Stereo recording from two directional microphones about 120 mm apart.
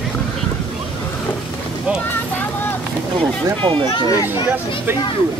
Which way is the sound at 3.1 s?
45° right (ahead or behind).